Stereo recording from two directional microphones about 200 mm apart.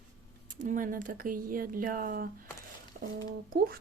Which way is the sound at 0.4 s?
40° right (ahead or behind).